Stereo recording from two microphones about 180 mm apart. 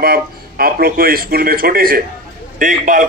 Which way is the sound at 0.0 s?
55° right (ahead or behind).